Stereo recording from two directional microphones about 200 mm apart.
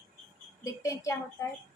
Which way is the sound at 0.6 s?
15° left (ahead or behind).